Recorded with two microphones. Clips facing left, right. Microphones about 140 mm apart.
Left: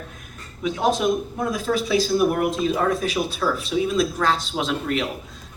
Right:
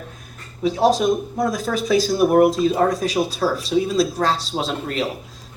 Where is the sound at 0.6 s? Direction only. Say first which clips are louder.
Right 4 dB; 35° right (ahead or behind).